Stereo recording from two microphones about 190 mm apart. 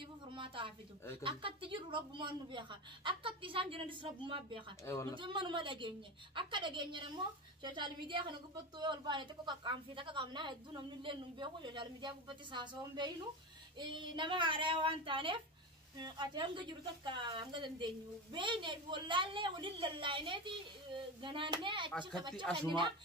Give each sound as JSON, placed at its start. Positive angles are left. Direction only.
{"t": 0.3, "sound": "a woman's voice", "side_deg": -25}
{"t": 22.5, "sound": "speech", "side_deg": 5}